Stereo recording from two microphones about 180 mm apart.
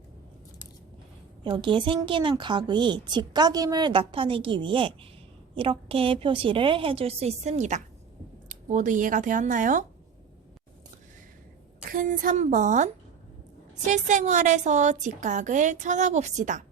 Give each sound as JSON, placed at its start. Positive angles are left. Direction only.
{"t": 1.5, "sound": "a woman's voice", "side_deg": -25}
{"t": 11.9, "sound": "a woman's voice", "side_deg": -50}